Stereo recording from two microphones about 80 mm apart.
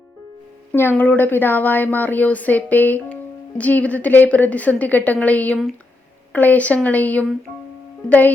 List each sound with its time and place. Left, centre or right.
0.7 s a woman's voice: left